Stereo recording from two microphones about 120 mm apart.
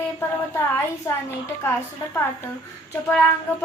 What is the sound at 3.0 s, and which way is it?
Speech, 15° left (ahead or behind).